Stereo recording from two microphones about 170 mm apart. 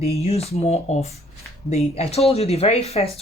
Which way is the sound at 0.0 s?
40° left (ahead or behind).